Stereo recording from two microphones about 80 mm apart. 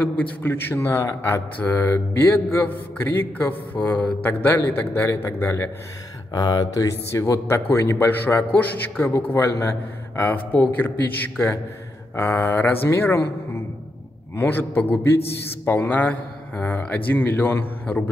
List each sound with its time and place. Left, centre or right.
0.0 s a man's voice: left
6.3 s speech: left
7.1 s a man's voice: left
9.1 s a man's voice: left
14.3 s a man's voice: left